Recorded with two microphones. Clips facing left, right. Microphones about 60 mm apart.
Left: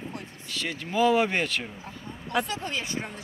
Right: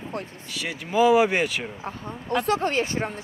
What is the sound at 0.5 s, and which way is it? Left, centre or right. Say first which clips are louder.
Speech: right 4 dB; centre.